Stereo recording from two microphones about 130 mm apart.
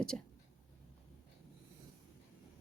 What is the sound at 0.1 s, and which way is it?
Speech, 10° left (ahead or behind).